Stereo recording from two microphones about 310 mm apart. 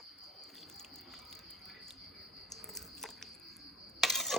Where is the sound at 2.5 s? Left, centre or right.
Centre.